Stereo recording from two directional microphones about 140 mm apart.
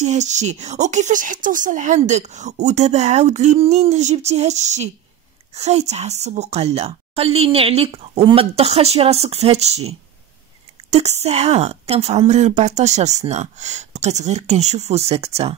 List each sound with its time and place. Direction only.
0.0 s a woman's voice: 55° right (ahead or behind)